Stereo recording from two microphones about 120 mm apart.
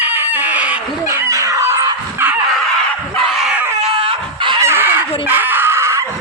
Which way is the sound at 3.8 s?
50° right (ahead or behind).